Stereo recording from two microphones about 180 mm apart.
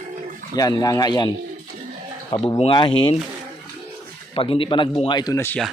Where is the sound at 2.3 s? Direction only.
30° left (ahead or behind).